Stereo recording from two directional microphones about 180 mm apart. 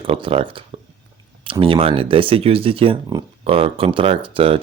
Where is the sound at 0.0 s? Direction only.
30° right (ahead or behind).